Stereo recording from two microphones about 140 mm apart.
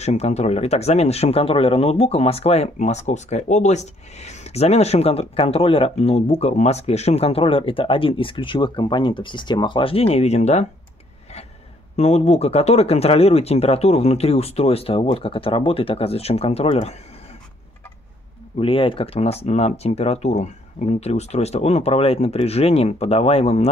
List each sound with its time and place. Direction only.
0.0 s speech: 50° left (ahead or behind)
12.0 s speech: 50° left (ahead or behind)
18.6 s speech: 40° left (ahead or behind)